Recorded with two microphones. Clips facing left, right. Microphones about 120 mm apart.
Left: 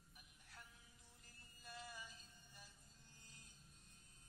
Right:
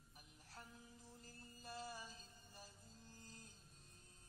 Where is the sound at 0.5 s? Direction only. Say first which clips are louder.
Right 6 dB; 35° right (ahead or behind).